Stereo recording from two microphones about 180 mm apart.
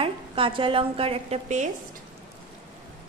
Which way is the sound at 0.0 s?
30° right (ahead or behind).